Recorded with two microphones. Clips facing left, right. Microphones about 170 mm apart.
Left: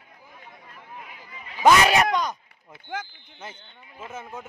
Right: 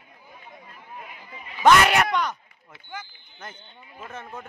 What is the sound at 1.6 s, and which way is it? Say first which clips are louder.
Speech: even; 10° left (ahead or behind).